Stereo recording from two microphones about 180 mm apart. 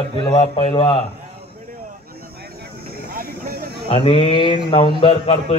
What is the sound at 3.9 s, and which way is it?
Speech, 30° left (ahead or behind).